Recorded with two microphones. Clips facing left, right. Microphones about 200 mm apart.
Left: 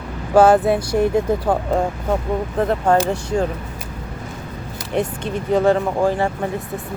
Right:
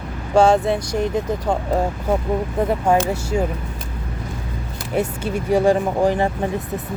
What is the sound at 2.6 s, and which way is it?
Speech, 10° right (ahead or behind).